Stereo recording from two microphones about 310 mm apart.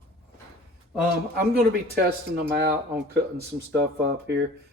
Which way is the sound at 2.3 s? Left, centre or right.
Right.